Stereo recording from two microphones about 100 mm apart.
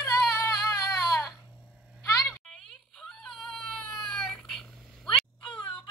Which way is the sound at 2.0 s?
30° left (ahead or behind).